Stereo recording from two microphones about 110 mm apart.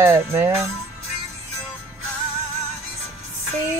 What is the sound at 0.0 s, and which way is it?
Music, 20° right (ahead or behind).